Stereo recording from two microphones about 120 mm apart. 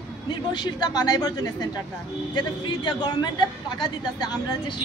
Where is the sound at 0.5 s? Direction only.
35° left (ahead or behind).